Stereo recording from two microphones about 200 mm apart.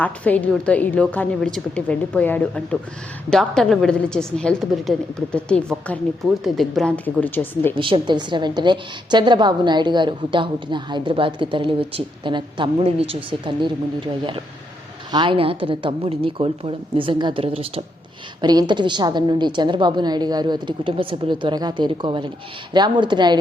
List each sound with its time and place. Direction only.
0.0 s a woman's voice: 5° left (ahead or behind)
7.8 s a woman's voice: 25° right (ahead or behind)
15.1 s a woman's voice: 25° right (ahead or behind)